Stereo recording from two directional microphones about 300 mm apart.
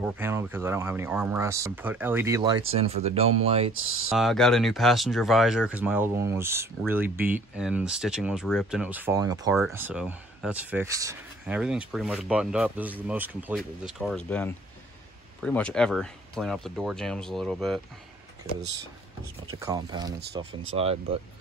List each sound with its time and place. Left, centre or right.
0.0 s speech: centre
4.1 s speech: centre
19.5 s speech: centre